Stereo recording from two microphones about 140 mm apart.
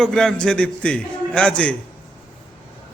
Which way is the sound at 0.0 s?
5° left (ahead or behind).